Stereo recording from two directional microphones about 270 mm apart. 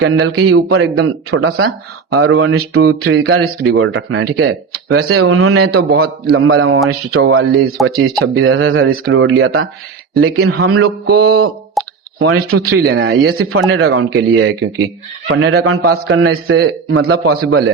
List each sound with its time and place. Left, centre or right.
0.0 s speech: right
5.7 s speech: right
11.1 s speech: right